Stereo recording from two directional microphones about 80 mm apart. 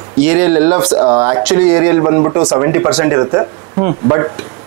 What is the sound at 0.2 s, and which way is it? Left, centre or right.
Speech, centre.